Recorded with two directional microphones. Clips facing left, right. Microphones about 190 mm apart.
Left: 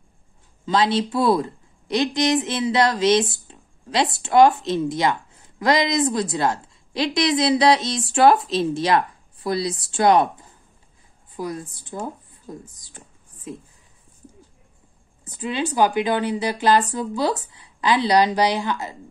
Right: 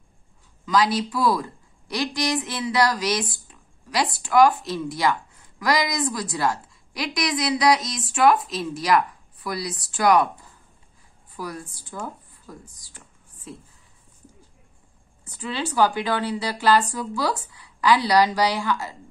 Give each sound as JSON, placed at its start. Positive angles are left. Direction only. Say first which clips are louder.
{"t": 0.7, "sound": "a woman's voice", "louder": "left 2 dB", "side_deg": 25}
{"t": 11.3, "sound": "a woman's voice", "louder": "left 4 dB", "side_deg": 20}
{"t": 15.2, "sound": "a woman's voice", "louder": "left 4 dB", "side_deg": 20}